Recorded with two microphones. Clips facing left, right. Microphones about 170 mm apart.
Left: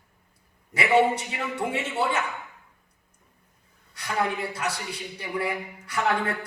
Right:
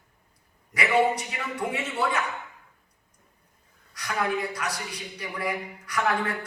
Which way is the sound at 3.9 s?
25° left (ahead or behind).